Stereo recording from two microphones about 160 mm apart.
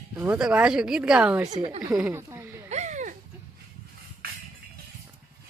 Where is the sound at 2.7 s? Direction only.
45° right (ahead or behind).